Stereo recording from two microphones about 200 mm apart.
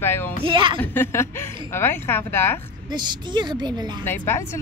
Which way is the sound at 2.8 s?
20° right (ahead or behind).